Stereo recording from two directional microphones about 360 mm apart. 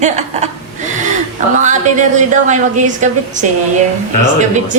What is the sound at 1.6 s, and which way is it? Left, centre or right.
Speech, centre.